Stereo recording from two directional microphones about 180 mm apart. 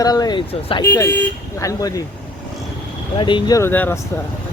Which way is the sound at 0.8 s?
15° left (ahead or behind).